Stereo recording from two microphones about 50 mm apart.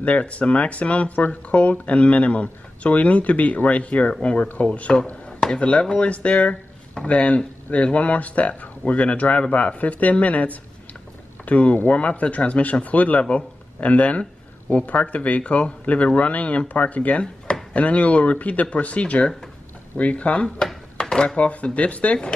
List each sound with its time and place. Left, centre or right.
0.0 s speech: left
20.6 s a sound: centre
21.4 s speech: left